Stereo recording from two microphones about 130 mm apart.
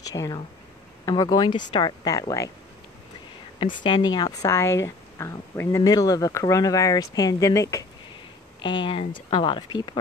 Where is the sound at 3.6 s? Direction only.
35° left (ahead or behind).